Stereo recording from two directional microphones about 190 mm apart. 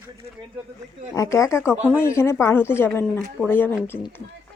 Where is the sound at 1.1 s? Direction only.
15° left (ahead or behind).